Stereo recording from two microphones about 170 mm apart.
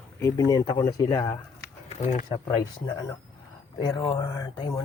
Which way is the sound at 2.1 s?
45° left (ahead or behind).